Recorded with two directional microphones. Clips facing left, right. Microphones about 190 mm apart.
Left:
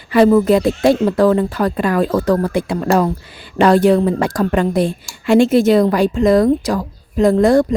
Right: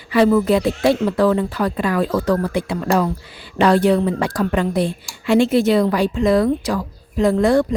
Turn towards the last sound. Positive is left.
turn(degrees=45)  # may be behind; listen again after turning